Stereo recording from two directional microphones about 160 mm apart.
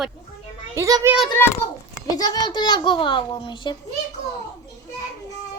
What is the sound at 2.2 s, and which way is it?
A child's voice, 25° left (ahead or behind).